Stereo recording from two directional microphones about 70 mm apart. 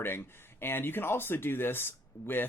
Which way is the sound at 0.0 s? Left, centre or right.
Left.